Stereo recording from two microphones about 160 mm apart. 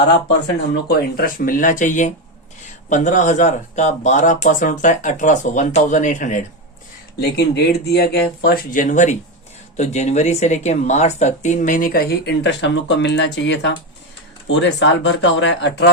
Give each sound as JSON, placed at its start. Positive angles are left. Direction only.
{"t": 0.7, "sound": "speech", "side_deg": 75}
{"t": 7.2, "sound": "speech", "side_deg": 85}